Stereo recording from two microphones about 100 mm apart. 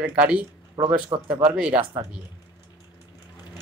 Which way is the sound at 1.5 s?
10° right (ahead or behind).